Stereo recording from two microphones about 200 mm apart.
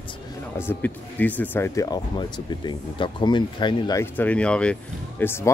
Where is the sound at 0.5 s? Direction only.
10° left (ahead or behind).